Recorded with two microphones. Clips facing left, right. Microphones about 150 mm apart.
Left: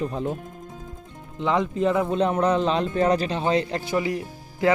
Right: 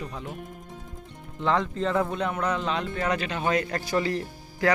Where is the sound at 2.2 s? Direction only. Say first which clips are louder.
Left 7 dB; 30° left (ahead or behind).